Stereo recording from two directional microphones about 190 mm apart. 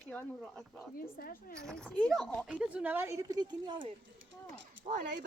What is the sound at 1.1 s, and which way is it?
Speech, 50° left (ahead or behind).